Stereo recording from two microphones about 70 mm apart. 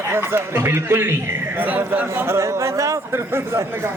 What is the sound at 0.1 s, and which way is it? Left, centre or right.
A man's voice, right.